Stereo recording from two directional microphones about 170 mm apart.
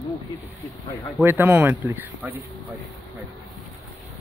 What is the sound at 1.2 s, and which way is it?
Speech, 10° right (ahead or behind).